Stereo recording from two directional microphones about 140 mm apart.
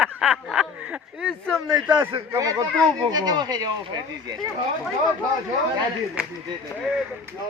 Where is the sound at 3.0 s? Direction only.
30° right (ahead or behind).